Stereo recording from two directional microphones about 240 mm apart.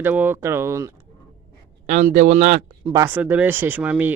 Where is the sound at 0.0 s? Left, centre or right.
Centre.